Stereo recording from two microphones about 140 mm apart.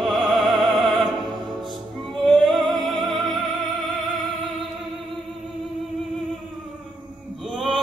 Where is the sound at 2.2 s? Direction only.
Centre (ahead or behind).